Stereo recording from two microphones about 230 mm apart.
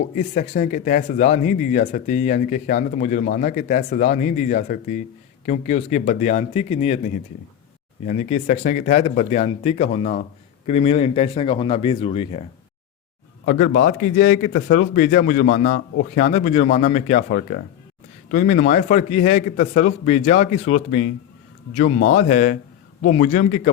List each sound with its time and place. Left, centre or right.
0.2 s speech: left
13.4 s speech: left